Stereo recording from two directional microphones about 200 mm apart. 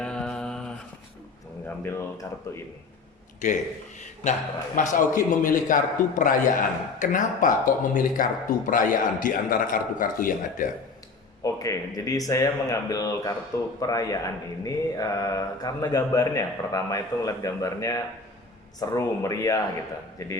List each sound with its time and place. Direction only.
0.0 s mantra: 5° left (ahead or behind)
1.8 s speech: 10° left (ahead or behind)
3.4 s a man's voice: 35° left (ahead or behind)
11.4 s speech: 15° left (ahead or behind)